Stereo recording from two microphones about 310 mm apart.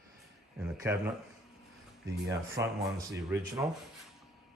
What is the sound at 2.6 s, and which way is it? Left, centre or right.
Speech, centre.